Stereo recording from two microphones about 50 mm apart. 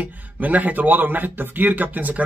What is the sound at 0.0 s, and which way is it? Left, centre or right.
A man's voice, right.